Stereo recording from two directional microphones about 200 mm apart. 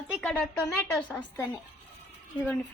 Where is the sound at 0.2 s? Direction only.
5° left (ahead or behind).